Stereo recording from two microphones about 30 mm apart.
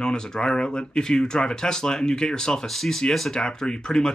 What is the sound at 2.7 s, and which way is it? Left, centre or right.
Speech, centre.